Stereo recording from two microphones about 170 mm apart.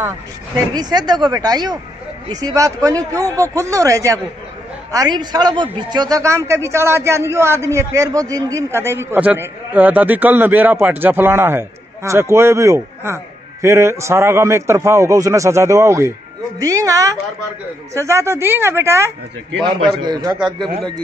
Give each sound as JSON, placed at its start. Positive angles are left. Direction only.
{"t": 0.6, "sound": "a man's voice", "side_deg": -25}